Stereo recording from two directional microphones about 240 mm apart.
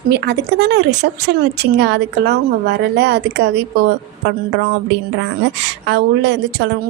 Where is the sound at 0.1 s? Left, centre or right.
Right.